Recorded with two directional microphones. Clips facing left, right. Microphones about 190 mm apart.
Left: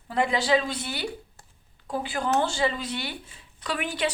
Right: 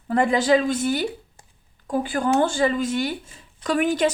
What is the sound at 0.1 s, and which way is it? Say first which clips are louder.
A woman's voice: right 5 dB; 50° right (ahead or behind).